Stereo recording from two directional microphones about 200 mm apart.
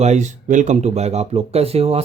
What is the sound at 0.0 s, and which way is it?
Speech, 35° right (ahead or behind).